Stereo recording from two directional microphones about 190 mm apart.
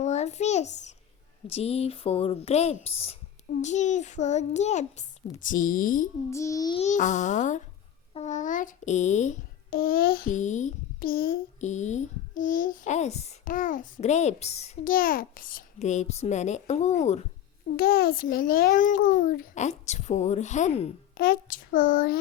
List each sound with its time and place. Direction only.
0.0 s a sound: 35° left (ahead or behind)
1.5 s a child's voice: 30° left (ahead or behind)
6.3 s a sound: 15° left (ahead or behind)
6.7 s a child's voice: 40° left (ahead or behind)
14.9 s a child's voice: 50° left (ahead or behind)
17.7 s a child's voice: 50° left (ahead or behind); by 20.9 s 35° left (ahead or behind)
21.2 s speech: 45° left (ahead or behind)